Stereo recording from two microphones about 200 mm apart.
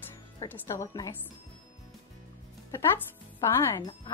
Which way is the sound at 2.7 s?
15° left (ahead or behind).